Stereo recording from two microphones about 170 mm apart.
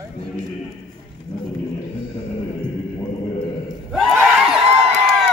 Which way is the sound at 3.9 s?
5° right (ahead or behind).